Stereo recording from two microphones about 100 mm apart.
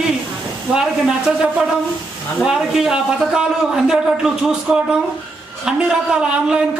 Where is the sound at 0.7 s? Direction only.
5° right (ahead or behind).